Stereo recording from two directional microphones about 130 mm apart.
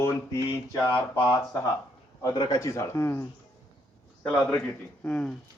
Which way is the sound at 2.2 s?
30° left (ahead or behind).